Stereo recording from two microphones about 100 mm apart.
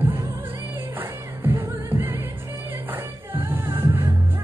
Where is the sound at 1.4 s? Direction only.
20° right (ahead or behind).